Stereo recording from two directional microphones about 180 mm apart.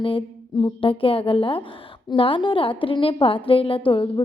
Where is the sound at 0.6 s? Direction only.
30° left (ahead or behind).